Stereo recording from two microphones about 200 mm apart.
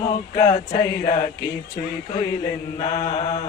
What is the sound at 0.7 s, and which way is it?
Speech, 35° left (ahead or behind).